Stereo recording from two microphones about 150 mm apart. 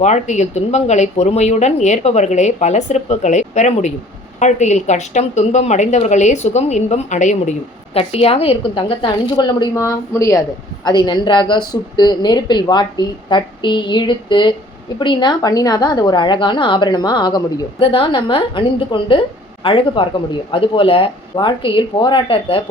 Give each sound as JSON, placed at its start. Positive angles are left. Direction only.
{"t": 0.0, "sound": "speech", "side_deg": 50}
{"t": 7.9, "sound": "a woman's voice", "side_deg": 40}